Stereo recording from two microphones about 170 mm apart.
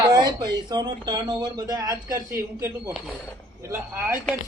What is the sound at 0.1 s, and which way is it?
Speech, 25° right (ahead or behind).